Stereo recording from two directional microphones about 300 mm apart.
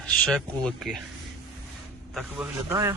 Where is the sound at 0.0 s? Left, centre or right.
Centre.